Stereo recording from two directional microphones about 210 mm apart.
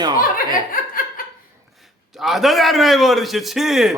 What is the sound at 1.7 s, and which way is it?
A man's voice, centre (ahead or behind).